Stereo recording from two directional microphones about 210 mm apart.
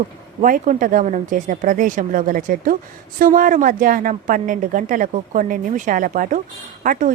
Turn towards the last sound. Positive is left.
turn(degrees=-40)  # may be behind; listen again after turning